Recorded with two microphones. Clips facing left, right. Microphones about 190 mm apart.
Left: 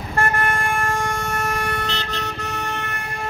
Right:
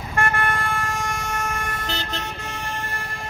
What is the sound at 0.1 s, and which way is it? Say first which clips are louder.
Vehicle: left 2 dB; 40° left (ahead or behind).